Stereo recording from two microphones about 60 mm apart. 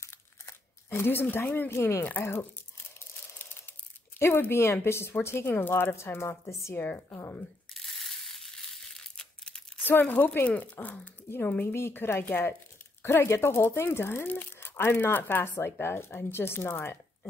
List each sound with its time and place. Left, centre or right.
0.0 s crumpling: left
1.2 s speech: left
1.7 s speech: left
4.2 s speech: left
6.7 s speech: left
7.7 s mechanisms: centre
8.9 s a sound: centre
9.8 s speech: left
11.7 s speech: left